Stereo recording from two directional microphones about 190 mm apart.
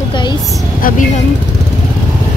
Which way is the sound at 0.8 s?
45° left (ahead or behind).